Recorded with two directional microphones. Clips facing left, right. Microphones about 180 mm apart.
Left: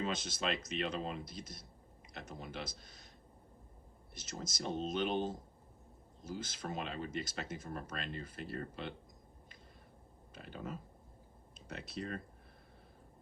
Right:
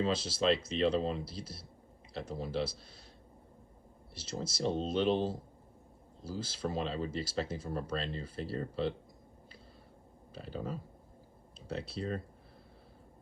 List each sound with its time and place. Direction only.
0.0 s speech: 30° right (ahead or behind)
4.1 s speech: 30° right (ahead or behind)
10.3 s speech: 35° right (ahead or behind)